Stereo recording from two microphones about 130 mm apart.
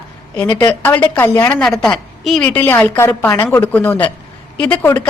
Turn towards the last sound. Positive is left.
turn(degrees=15)  # may be behind; listen again after turning